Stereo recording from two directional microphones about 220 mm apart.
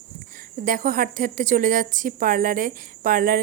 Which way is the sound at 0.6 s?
40° right (ahead or behind).